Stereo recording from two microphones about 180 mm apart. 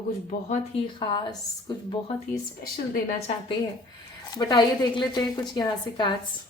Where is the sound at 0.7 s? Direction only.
25° left (ahead or behind).